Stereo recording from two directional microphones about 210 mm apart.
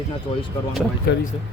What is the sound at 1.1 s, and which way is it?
Speech, 55° left (ahead or behind).